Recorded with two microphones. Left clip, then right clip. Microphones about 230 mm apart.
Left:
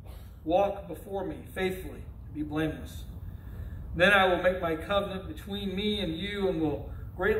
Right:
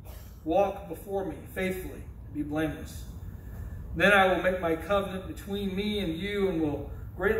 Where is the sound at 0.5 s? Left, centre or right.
Left.